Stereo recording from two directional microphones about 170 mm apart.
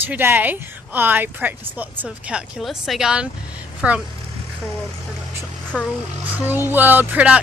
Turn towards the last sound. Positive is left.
turn(degrees=-10)  # may be behind; listen again after turning